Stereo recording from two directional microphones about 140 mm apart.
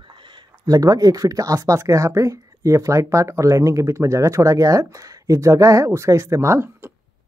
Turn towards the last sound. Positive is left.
turn(degrees=-20)  # may be behind; listen again after turning